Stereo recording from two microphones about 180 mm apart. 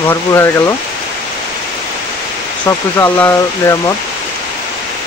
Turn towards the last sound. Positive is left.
turn(degrees=15)  # may be behind; listen again after turning